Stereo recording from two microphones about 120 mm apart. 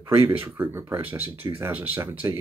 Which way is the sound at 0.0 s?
20° right (ahead or behind).